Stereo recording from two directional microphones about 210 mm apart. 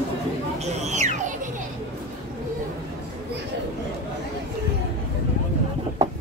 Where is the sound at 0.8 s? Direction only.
35° right (ahead or behind).